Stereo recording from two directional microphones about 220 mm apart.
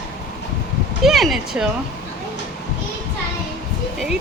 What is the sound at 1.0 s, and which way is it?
Speech, centre (ahead or behind).